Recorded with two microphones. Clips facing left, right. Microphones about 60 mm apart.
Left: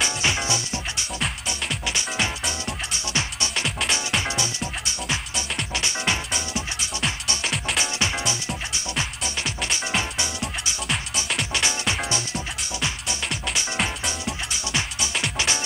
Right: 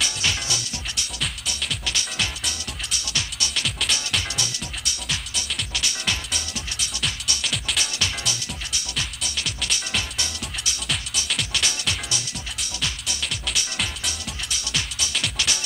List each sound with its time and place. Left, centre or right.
0.0 s music: left
1.2 s music: centre
2.0 s music: left
11.5 s music: left